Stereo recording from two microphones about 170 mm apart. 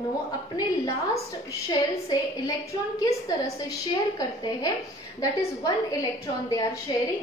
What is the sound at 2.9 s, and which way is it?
A woman's voice, 20° left (ahead or behind).